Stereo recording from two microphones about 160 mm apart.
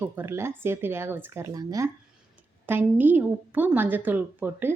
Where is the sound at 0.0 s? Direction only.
15° right (ahead or behind).